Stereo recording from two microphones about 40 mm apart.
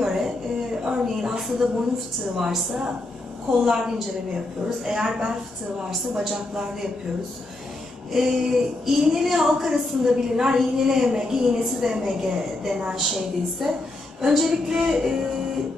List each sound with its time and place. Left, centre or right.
0.0 s a sound: centre
2.3 s a woman's voice: centre
8.1 s a woman's voice: centre